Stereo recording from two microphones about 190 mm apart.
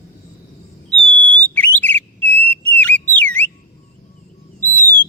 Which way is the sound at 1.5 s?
10° left (ahead or behind).